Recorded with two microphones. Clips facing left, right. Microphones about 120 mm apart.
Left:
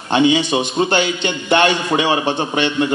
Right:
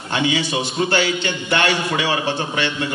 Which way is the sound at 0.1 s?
20° left (ahead or behind).